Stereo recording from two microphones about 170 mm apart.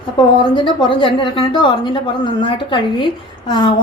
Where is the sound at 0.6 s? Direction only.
30° left (ahead or behind).